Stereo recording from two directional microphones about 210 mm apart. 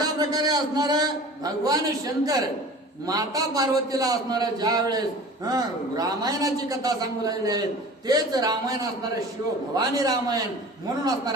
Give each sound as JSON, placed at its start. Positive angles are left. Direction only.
{"t": 0.0, "sound": "a man's voice", "side_deg": -20}